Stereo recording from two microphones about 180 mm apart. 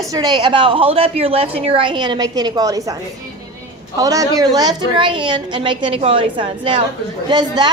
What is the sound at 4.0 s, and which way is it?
A woman's voice, 20° right (ahead or behind).